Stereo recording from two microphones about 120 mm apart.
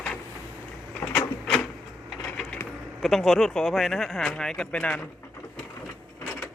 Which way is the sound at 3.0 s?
Centre (ahead or behind).